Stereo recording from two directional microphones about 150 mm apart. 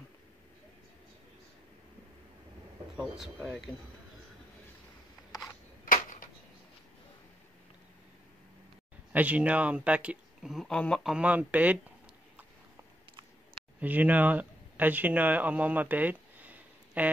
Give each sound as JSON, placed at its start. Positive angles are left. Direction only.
{"t": 3.4, "sound": "speech", "side_deg": 0}
{"t": 5.9, "sound": "a sound", "side_deg": 65}
{"t": 9.1, "sound": "speech", "side_deg": -10}
{"t": 11.1, "sound": "speech", "side_deg": -10}
{"t": 13.7, "sound": "speech", "side_deg": -10}